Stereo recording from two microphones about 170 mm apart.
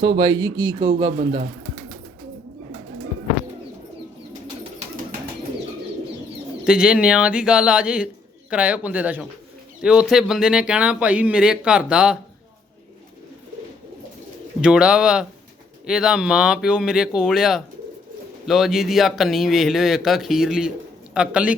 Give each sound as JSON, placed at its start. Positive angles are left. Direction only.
{"t": 0.2, "sound": "speech", "side_deg": -25}
{"t": 6.7, "sound": "speech", "side_deg": -5}
{"t": 14.6, "sound": "speech", "side_deg": -5}